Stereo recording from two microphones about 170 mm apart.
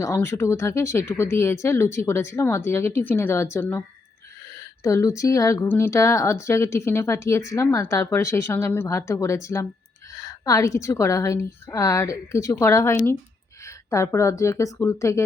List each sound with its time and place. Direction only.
0.0 s speech: 15° left (ahead or behind)